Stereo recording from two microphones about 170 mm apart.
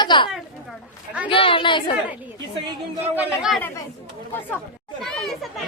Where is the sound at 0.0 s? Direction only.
25° left (ahead or behind).